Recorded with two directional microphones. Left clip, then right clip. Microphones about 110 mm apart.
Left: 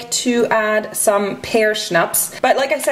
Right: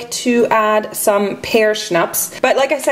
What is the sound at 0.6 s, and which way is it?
Speech, 35° right (ahead or behind).